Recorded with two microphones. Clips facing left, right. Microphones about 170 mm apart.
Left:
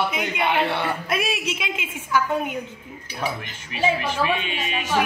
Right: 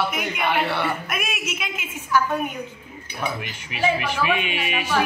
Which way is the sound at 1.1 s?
30° left (ahead or behind).